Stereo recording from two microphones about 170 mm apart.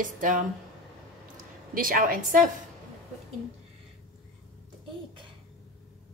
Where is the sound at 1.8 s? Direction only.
55° right (ahead or behind).